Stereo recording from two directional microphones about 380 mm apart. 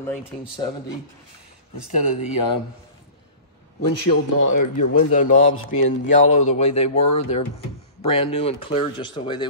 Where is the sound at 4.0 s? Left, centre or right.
Left.